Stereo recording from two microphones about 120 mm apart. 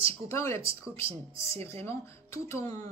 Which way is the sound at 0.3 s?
25° left (ahead or behind).